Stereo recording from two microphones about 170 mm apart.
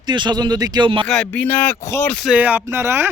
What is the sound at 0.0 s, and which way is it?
Speech, 25° right (ahead or behind).